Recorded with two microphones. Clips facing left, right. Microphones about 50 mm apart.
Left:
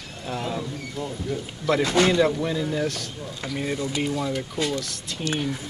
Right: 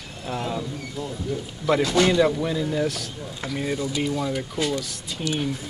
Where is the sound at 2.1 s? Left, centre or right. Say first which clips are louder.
Right 1 dB; centre.